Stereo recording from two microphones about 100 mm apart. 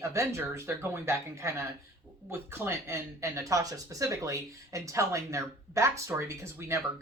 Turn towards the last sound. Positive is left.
turn(degrees=-30)  # may be behind; listen again after turning